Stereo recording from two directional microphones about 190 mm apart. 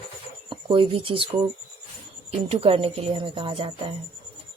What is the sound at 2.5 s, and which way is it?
A woman's voice, 30° right (ahead or behind).